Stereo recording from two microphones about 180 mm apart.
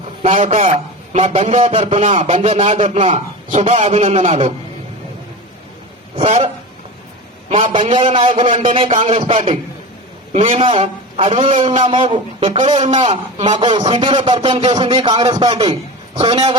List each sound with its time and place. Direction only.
0.2 s a man's voice: 35° right (ahead or behind)
6.1 s a man's voice: 35° right (ahead or behind)
7.5 s a man's voice: 30° right (ahead or behind)